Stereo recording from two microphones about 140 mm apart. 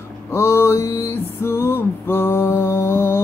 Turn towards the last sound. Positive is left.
turn(degrees=15)  # may be behind; listen again after turning